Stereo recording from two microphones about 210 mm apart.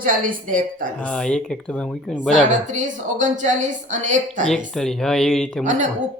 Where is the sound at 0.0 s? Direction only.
40° right (ahead or behind).